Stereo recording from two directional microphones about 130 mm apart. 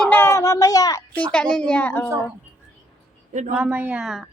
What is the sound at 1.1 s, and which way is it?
Speech, 10° left (ahead or behind).